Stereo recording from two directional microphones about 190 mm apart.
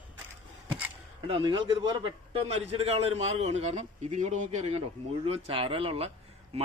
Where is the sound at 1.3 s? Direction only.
25° right (ahead or behind).